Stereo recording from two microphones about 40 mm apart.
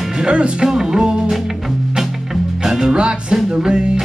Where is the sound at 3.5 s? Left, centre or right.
Right.